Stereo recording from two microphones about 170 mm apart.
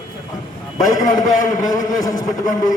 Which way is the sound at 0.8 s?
20° left (ahead or behind).